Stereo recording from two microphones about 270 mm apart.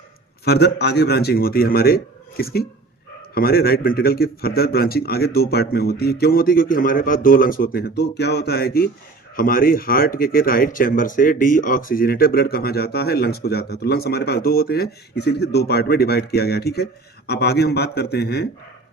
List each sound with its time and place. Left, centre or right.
0.4 s speech: left